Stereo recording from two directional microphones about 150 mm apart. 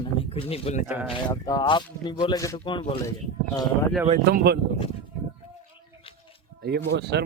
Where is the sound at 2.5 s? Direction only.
35° left (ahead or behind).